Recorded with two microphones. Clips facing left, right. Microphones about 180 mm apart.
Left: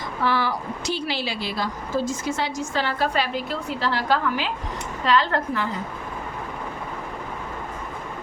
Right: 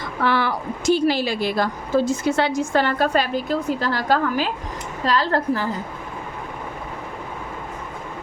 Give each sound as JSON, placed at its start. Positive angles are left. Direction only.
{"t": 0.2, "sound": "a woman's voice", "side_deg": -65}